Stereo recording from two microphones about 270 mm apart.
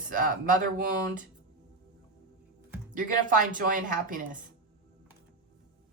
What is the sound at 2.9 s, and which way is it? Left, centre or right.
Speech, right.